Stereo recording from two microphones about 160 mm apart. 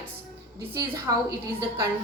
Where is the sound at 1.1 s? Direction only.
25° right (ahead or behind).